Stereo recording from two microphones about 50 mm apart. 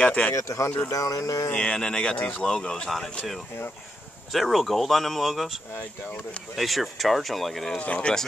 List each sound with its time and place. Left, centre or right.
0.0 s speech: left
0.3 s speech: left
1.5 s speech: left
2.1 s speech: left
2.4 s speech: centre
4.3 s speech: centre
7.8 s speech: left